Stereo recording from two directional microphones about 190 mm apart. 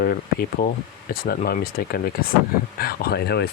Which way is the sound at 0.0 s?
50° left (ahead or behind).